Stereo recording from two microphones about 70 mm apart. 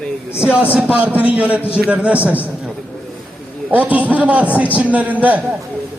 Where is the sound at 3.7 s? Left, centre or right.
Right.